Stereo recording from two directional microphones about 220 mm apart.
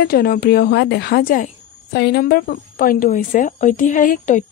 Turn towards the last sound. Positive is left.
turn(degrees=35)  # may be behind; listen again after turning